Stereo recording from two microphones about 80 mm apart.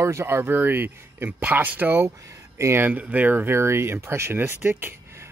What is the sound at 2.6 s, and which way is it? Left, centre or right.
Speech, right.